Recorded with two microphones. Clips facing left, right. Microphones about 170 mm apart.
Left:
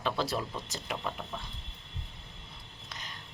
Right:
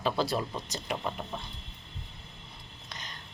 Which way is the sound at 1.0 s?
20° right (ahead or behind).